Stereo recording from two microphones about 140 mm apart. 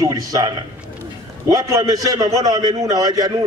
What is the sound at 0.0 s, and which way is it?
Speech, 25° right (ahead or behind).